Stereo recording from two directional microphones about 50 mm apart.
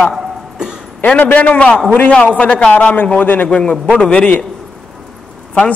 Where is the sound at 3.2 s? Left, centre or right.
Left.